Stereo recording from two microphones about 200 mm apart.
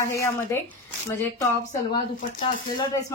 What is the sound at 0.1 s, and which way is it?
Speech, 15° left (ahead or behind).